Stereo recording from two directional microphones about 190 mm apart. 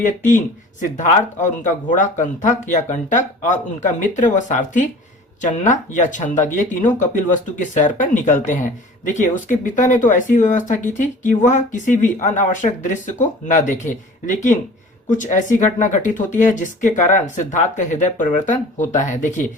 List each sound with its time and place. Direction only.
0.0 s speech: 40° left (ahead or behind)